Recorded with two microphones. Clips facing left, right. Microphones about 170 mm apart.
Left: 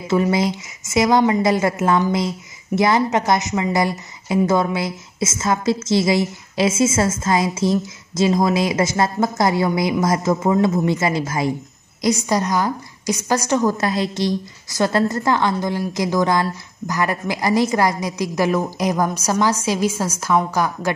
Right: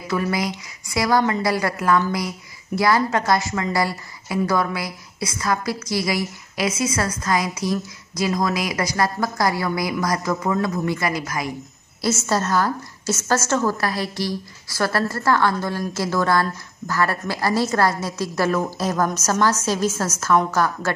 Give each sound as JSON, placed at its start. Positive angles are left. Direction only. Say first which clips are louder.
{"t": 0.1, "sound": "a woman's voice", "louder": "left 5 dB", "side_deg": 25}
{"t": 12.0, "sound": "a woman's voice", "louder": "left 3 dB", "side_deg": 15}